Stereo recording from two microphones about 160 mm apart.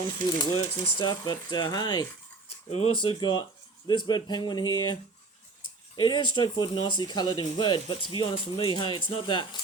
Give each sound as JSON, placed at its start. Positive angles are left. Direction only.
{"t": 0.7, "sound": "speech", "side_deg": 30}
{"t": 2.6, "sound": "speech", "side_deg": 35}
{"t": 6.0, "sound": "speech", "side_deg": 30}